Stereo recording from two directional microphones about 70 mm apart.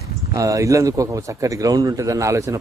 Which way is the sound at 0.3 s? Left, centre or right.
Right.